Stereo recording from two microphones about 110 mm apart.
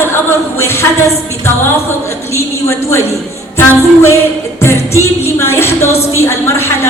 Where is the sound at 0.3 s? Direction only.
25° left (ahead or behind).